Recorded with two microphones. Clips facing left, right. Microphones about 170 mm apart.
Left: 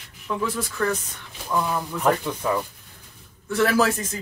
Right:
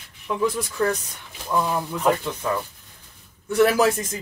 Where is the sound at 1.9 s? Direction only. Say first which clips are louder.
Even; 15° right (ahead or behind).